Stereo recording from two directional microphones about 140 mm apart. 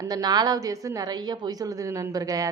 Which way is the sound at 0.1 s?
30° right (ahead or behind).